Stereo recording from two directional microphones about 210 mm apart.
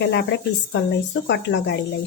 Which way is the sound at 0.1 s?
55° left (ahead or behind).